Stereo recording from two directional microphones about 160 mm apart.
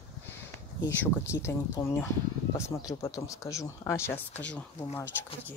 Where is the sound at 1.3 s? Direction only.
15° left (ahead or behind).